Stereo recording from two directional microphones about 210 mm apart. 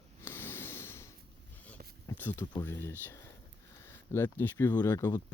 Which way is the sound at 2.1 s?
10° left (ahead or behind).